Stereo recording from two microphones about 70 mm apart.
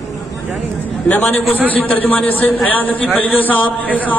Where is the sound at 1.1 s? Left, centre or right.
Left.